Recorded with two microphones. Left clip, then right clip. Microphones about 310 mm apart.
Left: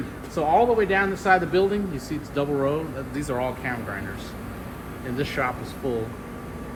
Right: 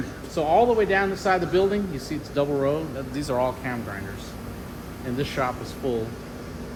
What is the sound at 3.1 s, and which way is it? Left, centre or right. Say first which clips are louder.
Speech: right 3 dB; right.